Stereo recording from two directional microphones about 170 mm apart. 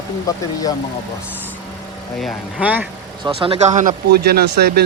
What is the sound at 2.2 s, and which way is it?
Speech, 10° right (ahead or behind).